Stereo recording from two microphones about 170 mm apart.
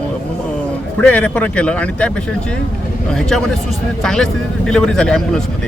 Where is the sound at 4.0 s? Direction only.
5° left (ahead or behind).